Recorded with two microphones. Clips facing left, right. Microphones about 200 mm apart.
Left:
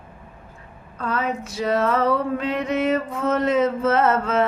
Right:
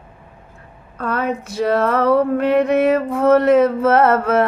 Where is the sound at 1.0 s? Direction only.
55° right (ahead or behind).